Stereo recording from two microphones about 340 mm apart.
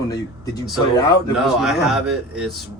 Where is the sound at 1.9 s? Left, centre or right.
Centre.